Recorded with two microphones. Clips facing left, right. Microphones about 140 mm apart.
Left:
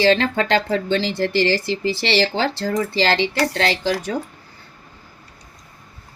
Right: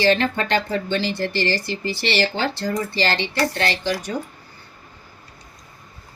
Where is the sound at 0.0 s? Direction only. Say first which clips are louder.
Left 2 dB; 90° left.